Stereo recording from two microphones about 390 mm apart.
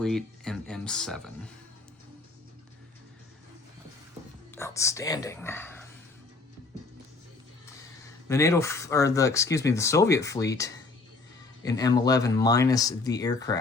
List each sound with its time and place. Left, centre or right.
0.0 s speech: centre
4.5 s speech: centre
8.3 s speech: centre